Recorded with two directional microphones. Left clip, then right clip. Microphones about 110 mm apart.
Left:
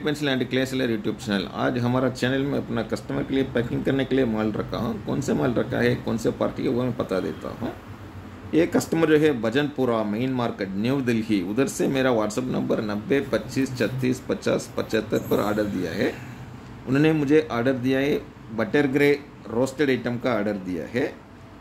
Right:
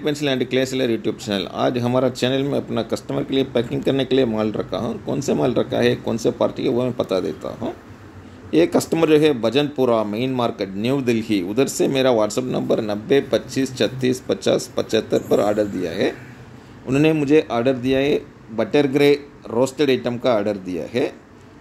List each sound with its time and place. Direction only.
0.0 s speech: 20° right (ahead or behind)